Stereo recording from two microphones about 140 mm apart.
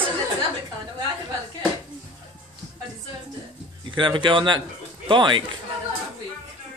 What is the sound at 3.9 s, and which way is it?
Speech, 35° right (ahead or behind).